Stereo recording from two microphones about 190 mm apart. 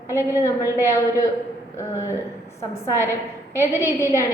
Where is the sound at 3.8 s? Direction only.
15° left (ahead or behind).